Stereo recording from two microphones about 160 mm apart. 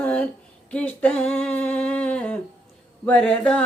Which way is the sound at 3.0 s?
5° left (ahead or behind).